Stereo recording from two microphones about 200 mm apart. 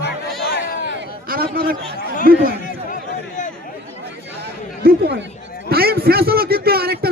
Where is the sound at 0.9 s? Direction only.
50° right (ahead or behind).